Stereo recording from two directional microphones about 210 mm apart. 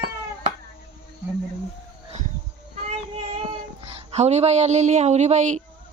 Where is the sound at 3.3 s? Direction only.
30° right (ahead or behind).